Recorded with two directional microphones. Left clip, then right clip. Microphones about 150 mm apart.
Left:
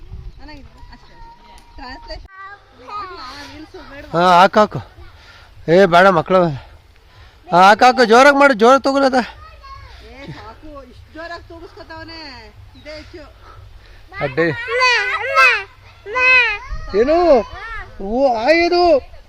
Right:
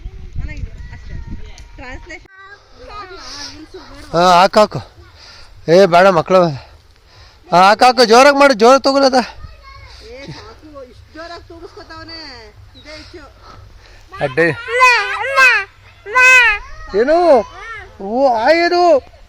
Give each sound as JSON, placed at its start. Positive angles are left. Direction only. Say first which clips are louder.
{"t": 4.1, "sound": "a man's voice", "louder": "right 1 dB", "side_deg": 0}
{"t": 11.1, "sound": "a sound", "louder": "left 2 dB", "side_deg": 25}
{"t": 14.3, "sound": "speech", "louder": "right 3 dB", "side_deg": -10}
{"t": 14.6, "sound": "a child's voice", "louder": "right 4 dB", "side_deg": 20}
{"t": 15.1, "sound": "babbling", "louder": "right 2 dB", "side_deg": 15}
{"t": 16.9, "sound": "speech", "louder": "right 2 dB", "side_deg": 0}